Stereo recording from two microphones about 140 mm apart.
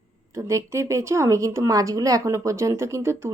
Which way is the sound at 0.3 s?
20° right (ahead or behind).